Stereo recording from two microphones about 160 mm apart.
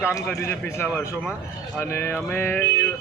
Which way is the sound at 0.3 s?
15° left (ahead or behind).